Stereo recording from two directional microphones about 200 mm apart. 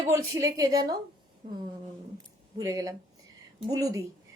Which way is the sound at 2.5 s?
20° right (ahead or behind).